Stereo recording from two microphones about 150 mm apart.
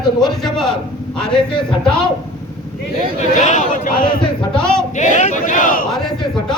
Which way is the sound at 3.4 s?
55° left (ahead or behind).